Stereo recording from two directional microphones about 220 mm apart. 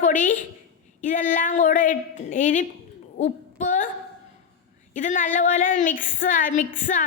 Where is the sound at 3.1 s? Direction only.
35° left (ahead or behind).